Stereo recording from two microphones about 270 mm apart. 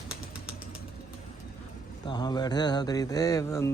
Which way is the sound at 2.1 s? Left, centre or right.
Centre.